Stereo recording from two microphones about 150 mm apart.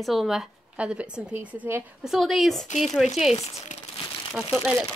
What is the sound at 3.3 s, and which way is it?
Speech, 45° left (ahead or behind).